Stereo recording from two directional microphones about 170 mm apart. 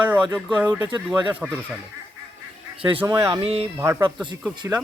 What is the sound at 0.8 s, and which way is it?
Speech, 25° right (ahead or behind).